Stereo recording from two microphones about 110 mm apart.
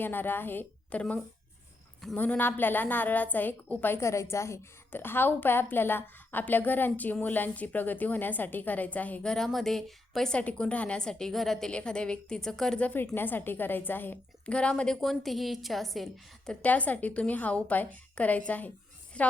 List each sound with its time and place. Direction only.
0.0 s a woman's voice: 20° left (ahead or behind); by 16.0 s centre (ahead or behind)
16.5 s a woman's voice: 15° left (ahead or behind)